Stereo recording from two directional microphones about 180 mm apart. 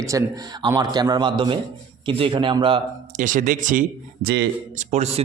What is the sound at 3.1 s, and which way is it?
Speech, 45° right (ahead or behind).